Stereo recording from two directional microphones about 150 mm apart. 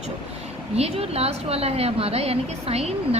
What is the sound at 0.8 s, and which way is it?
A woman's voice, 45° right (ahead or behind).